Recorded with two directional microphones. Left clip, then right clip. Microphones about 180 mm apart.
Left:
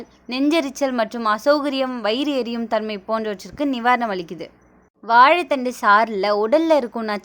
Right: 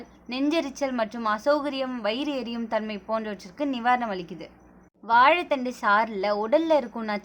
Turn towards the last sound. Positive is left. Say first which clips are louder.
# left 5 dB
turn(degrees=30)  # may be behind; listen again after turning